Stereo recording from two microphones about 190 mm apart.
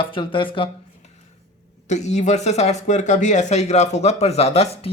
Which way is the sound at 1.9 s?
35° left (ahead or behind).